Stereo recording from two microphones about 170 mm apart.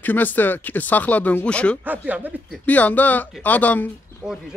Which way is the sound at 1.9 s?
10° right (ahead or behind).